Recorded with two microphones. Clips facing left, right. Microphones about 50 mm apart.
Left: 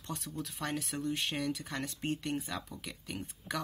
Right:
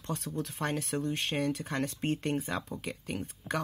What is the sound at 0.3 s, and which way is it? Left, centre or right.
Speech, right.